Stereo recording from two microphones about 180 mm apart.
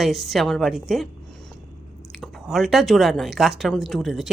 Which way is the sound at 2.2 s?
Centre (ahead or behind).